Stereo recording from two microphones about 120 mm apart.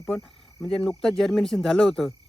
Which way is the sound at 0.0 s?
10° left (ahead or behind).